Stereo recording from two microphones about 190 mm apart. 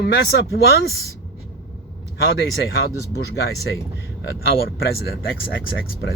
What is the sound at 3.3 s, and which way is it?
Speech, 55° left (ahead or behind).